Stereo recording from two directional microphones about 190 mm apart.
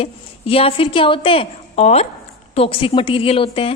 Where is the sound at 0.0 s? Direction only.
30° left (ahead or behind).